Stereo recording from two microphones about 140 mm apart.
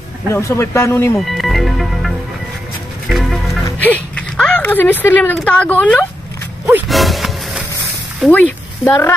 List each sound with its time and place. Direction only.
0.3 s a man's voice: 20° left (ahead or behind)
1.1 s music: centre (ahead or behind)
3.8 s speech: 10° left (ahead or behind)
6.9 s music: centre (ahead or behind)
8.8 s speech: 15° left (ahead or behind)